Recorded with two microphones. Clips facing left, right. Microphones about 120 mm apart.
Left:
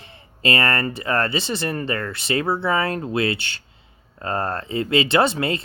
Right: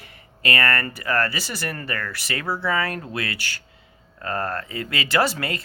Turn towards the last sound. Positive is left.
turn(degrees=25)  # may be behind; listen again after turning